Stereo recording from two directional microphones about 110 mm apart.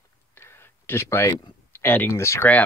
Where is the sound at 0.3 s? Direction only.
20° left (ahead or behind).